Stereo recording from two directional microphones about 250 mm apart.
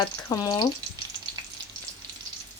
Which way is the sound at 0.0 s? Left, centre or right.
Centre.